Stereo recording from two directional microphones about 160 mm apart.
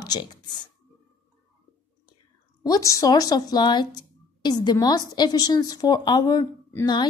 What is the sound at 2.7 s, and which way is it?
Speech, 20° left (ahead or behind).